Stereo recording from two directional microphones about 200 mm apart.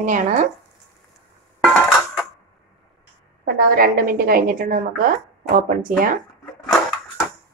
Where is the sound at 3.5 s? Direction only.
50° right (ahead or behind).